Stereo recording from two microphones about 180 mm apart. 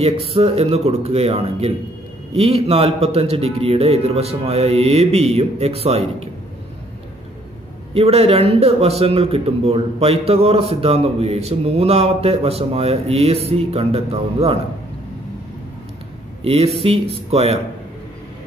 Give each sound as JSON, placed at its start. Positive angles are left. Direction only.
{"t": 0.0, "sound": "a man's voice", "side_deg": -30}
{"t": 7.9, "sound": "a man's voice", "side_deg": -35}
{"t": 16.4, "sound": "a man's voice", "side_deg": -35}